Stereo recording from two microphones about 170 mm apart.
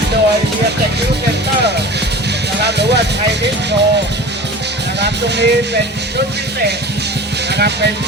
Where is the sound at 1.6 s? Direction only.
80° right.